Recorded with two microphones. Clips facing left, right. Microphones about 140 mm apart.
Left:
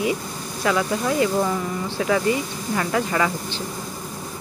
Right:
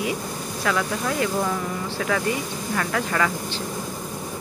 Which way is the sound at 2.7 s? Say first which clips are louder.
Left 2 dB; 10° left (ahead or behind).